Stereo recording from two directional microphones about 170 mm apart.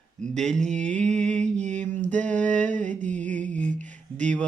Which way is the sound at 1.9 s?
50° right (ahead or behind).